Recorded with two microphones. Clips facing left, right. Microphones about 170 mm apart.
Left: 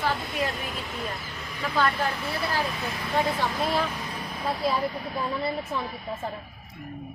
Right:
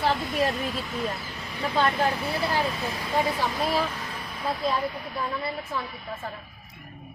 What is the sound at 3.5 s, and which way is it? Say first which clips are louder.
Speech: even; centre (ahead or behind).